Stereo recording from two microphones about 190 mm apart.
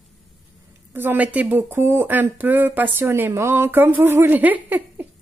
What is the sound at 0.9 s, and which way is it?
A woman's voice, 10° right (ahead or behind).